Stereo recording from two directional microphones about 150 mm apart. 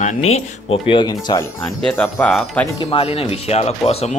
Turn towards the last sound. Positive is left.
turn(degrees=40)  # may be behind; listen again after turning